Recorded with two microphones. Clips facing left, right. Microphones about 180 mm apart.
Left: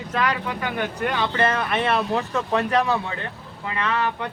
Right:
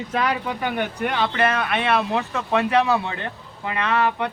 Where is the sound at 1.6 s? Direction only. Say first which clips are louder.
Right 1 dB; centre (ahead or behind).